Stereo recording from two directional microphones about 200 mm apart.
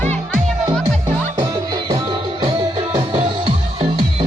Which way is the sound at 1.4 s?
20° right (ahead or behind).